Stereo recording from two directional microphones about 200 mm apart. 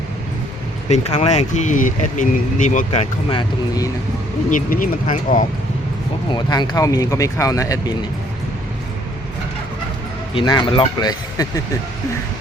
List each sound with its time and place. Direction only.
0.9 s speech: 30° left (ahead or behind)
4.4 s speech: 40° left (ahead or behind)
6.3 s speech: 20° left (ahead or behind)
10.3 s speech: 25° left (ahead or behind)